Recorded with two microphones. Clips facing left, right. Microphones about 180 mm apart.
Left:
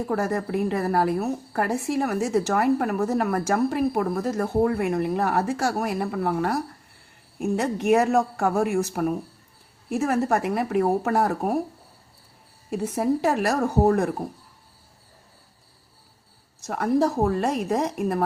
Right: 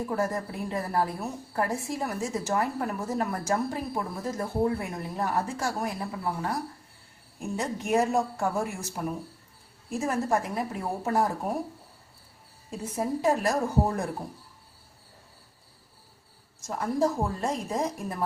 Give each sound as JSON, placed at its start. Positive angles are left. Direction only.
{"t": 0.1, "sound": "a woman's voice", "side_deg": 70}
{"t": 12.7, "sound": "a woman's voice", "side_deg": 70}
{"t": 16.6, "sound": "a woman's voice", "side_deg": 70}